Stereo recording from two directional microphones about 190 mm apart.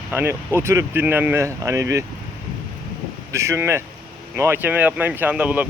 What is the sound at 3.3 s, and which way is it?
Speech, 15° right (ahead or behind).